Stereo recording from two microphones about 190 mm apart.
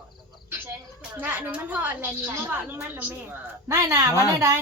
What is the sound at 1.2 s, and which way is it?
A woman's voice, 10° right (ahead or behind).